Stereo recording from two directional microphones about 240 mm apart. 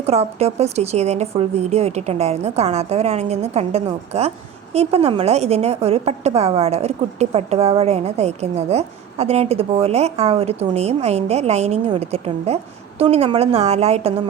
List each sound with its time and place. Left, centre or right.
0.0 s a woman's voice: right